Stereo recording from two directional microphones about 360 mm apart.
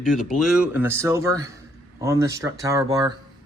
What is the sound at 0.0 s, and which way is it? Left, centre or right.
A man's voice, centre.